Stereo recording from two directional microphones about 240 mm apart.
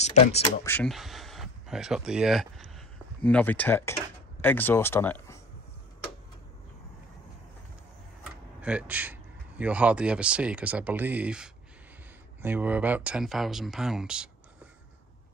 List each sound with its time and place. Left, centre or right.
0.0 s speech: left
0.7 s speech: centre
8.2 s speech: centre